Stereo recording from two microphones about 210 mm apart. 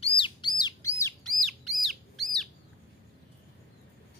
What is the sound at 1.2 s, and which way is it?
Bird, centre (ahead or behind).